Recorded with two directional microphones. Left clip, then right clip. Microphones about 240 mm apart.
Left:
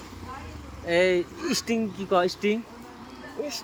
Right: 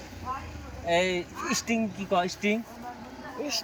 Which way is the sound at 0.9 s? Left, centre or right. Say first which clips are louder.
Left 4 dB; centre.